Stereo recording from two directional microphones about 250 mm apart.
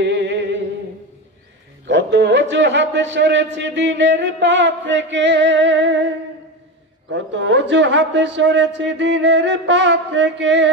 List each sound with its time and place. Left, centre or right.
0.0 s music: right
1.9 s a sound: right
3.5 s a man's voice: right